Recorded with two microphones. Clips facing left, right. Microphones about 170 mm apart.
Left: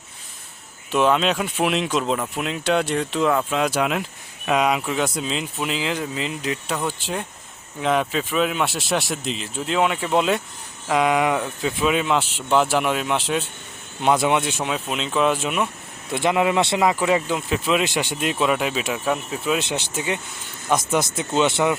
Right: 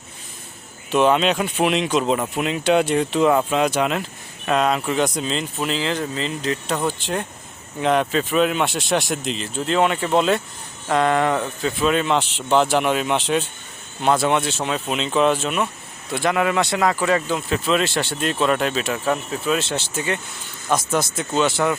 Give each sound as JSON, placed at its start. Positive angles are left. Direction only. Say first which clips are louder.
{"t": 0.9, "sound": "speech", "louder": "right 2 dB", "side_deg": 0}
{"t": 14.0, "sound": "speech", "louder": "even", "side_deg": 15}
{"t": 16.1, "sound": "speech", "louder": "left 1 dB", "side_deg": 20}